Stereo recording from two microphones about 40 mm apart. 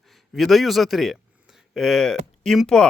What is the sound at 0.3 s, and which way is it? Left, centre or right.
Speech, centre.